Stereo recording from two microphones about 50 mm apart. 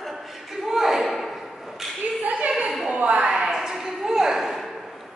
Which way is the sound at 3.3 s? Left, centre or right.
Centre.